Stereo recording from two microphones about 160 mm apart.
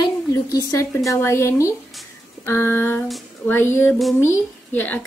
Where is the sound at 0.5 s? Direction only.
20° left (ahead or behind).